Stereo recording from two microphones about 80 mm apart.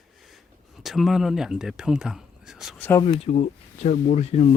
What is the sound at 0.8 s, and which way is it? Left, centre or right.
Speech, centre.